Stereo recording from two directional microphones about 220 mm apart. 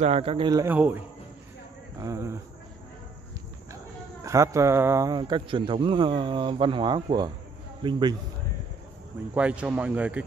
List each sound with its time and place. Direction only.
0.0 s a man's voice: 25° right (ahead or behind)
4.2 s a man's voice: 15° right (ahead or behind)
9.3 s a man's voice: 5° right (ahead or behind)